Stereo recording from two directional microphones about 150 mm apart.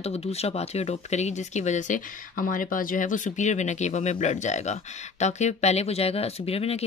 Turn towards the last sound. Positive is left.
turn(degrees=40)  # may be behind; listen again after turning